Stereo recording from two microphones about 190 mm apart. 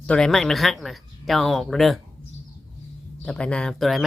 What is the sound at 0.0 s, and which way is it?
Speech, 5° left (ahead or behind).